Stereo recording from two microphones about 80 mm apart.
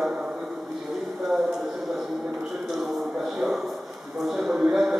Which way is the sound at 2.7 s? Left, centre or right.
Centre.